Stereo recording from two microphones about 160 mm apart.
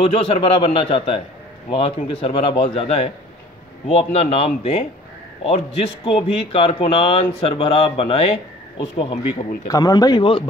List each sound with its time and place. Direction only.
0.0 s speech: 40° left (ahead or behind)
6.0 s speech: 35° left (ahead or behind)
9.7 s speech: 25° left (ahead or behind)